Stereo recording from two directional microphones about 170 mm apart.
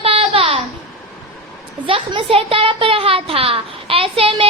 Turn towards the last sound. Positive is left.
turn(degrees=-30)  # may be behind; listen again after turning